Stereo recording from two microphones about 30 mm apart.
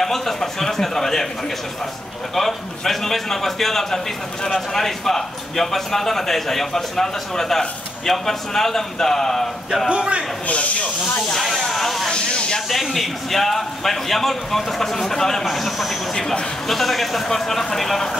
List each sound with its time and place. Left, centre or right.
0.0 s speech: centre
2.3 s a man's voice: centre
9.8 s a man's voice: right
10.4 s speech: left
11.3 s speech: centre
12.1 s hiss: left
12.6 s a man's voice: centre
15.4 s speech: centre
16.1 s a man's voice: centre